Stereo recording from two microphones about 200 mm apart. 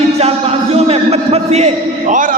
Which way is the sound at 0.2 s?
30° right (ahead or behind).